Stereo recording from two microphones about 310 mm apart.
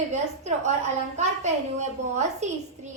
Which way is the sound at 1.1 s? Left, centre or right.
Right.